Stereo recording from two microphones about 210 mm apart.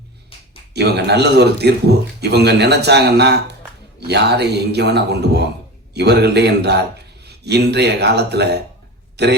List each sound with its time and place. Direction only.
0.7 s speech: 50° right (ahead or behind)